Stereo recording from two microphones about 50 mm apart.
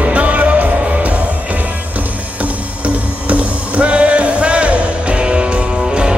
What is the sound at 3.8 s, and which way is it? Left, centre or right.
Music, right.